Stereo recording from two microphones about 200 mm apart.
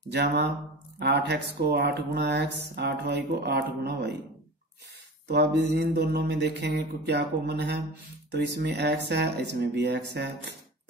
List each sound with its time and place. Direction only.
0.1 s speech: 55° right (ahead or behind)
5.3 s speech: 60° right (ahead or behind)